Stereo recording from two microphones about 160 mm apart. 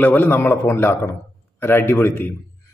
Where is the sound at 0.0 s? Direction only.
10° left (ahead or behind).